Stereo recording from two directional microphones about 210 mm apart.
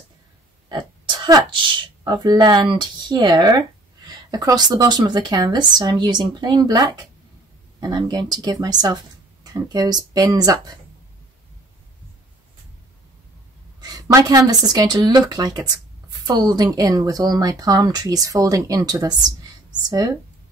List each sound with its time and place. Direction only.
0.7 s speech: 20° right (ahead or behind)
13.7 s speech: 20° right (ahead or behind)